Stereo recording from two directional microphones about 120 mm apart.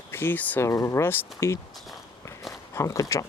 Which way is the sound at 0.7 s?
25° left (ahead or behind).